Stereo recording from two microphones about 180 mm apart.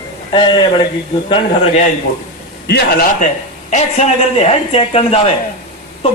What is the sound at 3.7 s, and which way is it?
A man's voice, 40° left (ahead or behind).